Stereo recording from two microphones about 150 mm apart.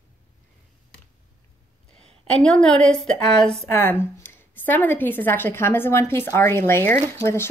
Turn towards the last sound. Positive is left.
turn(degrees=15)  # may be behind; listen again after turning